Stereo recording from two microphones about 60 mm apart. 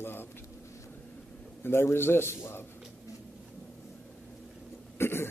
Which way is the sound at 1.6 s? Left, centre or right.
Left.